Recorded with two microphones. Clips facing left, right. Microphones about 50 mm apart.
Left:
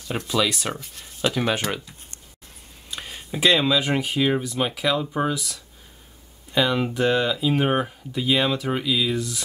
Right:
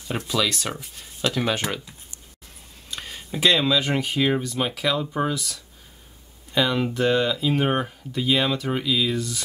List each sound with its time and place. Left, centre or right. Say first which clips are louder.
0.3 s speech: left 2 dB; centre
0.7 s speech: left 1 dB; centre
1.2 s speech: left 1 dB; centre
2.9 s speech: even; centre